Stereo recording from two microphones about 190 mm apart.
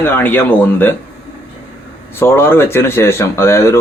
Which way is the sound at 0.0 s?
10° left (ahead or behind).